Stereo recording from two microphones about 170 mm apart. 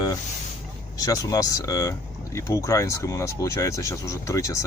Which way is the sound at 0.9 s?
20° left (ahead or behind).